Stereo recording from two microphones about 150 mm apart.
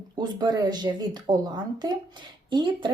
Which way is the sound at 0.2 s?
25° right (ahead or behind).